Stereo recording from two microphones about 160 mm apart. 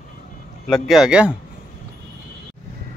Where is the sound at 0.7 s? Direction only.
Centre (ahead or behind).